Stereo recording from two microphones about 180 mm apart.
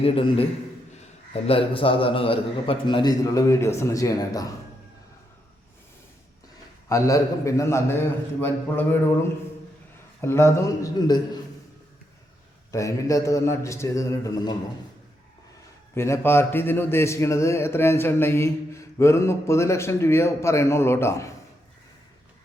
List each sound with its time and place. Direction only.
0.0 s a man's voice: 30° left (ahead or behind)
6.8 s a man's voice: 15° left (ahead or behind)
10.2 s a man's voice: 15° left (ahead or behind)
12.7 s a man's voice: 15° left (ahead or behind)
16.0 s a man's voice: 15° left (ahead or behind)